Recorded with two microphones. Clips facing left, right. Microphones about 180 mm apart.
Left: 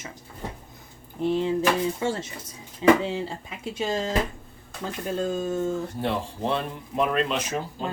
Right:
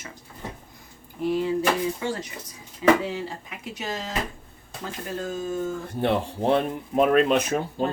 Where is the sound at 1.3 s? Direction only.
25° left (ahead or behind).